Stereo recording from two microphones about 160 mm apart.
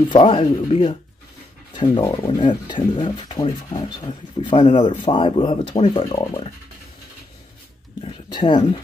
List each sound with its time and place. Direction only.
0.1 s speech: 30° left (ahead or behind)
6.1 s speech: 25° left (ahead or behind)
8.0 s speech: 30° left (ahead or behind)